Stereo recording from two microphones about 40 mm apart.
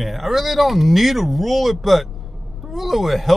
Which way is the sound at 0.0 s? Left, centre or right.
Centre.